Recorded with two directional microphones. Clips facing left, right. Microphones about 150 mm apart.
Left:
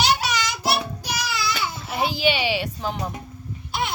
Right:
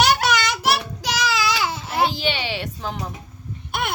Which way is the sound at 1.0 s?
90° right.